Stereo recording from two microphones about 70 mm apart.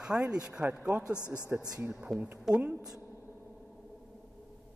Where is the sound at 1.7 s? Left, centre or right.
Right.